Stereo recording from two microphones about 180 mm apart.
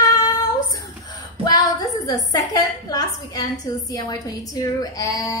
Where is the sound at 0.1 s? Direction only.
20° left (ahead or behind).